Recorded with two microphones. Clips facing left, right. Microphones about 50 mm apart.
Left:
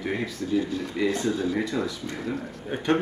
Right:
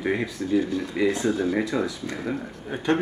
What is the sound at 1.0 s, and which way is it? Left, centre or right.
Speech, right.